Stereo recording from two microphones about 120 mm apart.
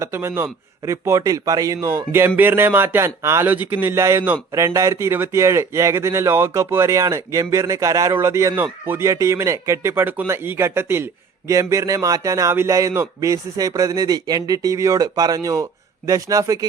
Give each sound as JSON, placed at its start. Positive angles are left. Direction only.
{"t": 0.0, "sound": "speech", "side_deg": -20}